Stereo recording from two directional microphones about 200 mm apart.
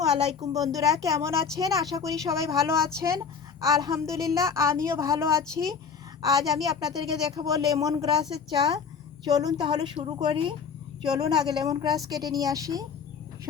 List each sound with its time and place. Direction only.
0.3 s a woman's voice: 20° right (ahead or behind)